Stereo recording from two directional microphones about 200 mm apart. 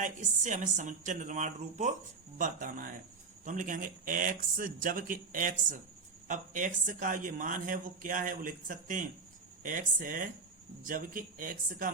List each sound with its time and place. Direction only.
0.0 s speech: 40° right (ahead or behind)